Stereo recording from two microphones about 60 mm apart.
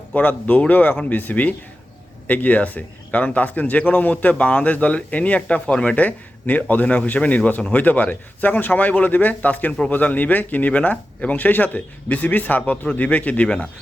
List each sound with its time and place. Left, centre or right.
0.1 s speech: left